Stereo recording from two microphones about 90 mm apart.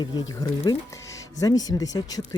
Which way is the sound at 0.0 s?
50° left (ahead or behind).